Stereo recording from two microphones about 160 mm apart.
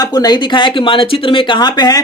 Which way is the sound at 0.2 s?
30° left (ahead or behind).